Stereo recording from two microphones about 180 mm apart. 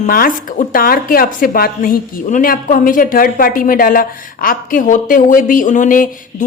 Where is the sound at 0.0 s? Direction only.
50° left (ahead or behind).